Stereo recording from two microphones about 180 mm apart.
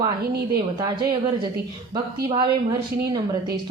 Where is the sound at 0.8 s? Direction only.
25° right (ahead or behind).